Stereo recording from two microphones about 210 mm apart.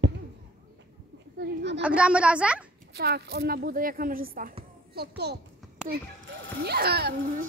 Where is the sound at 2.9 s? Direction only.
50° right (ahead or behind).